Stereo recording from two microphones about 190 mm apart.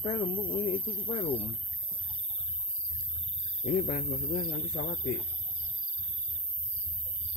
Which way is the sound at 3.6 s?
45° left (ahead or behind).